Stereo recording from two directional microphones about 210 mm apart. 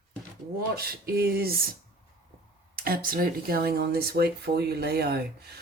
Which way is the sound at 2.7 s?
45° right (ahead or behind).